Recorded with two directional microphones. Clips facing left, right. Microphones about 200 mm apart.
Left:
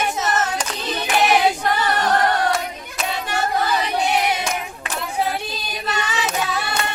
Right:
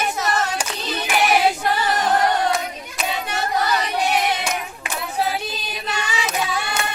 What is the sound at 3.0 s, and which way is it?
Hands, 5° right (ahead or behind).